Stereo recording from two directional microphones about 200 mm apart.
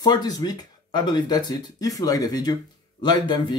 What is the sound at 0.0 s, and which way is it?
Speech, 20° left (ahead or behind).